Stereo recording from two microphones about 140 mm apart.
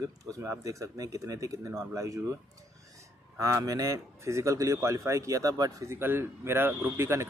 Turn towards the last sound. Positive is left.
turn(degrees=-15)  # may be behind; listen again after turning